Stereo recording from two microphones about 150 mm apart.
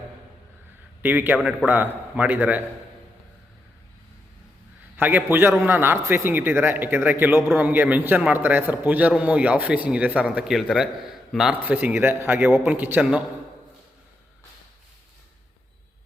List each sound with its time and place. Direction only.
1.0 s speech: 10° right (ahead or behind)
4.9 s speech: 10° right (ahead or behind)